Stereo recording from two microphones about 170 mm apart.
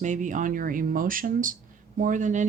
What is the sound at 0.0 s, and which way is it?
Speech, 50° right (ahead or behind).